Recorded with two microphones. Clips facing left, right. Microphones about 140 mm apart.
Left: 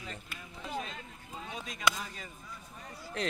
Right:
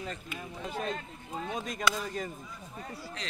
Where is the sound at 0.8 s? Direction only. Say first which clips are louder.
Right 9 dB; 50° right (ahead or behind).